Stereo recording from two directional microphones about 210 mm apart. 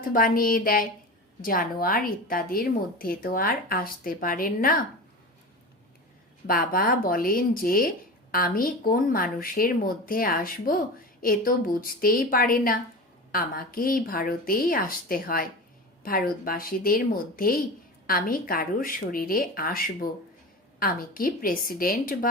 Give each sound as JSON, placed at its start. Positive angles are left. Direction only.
{"t": 0.0, "sound": "a woman's voice", "side_deg": 40}
{"t": 6.5, "sound": "a woman's voice", "side_deg": 45}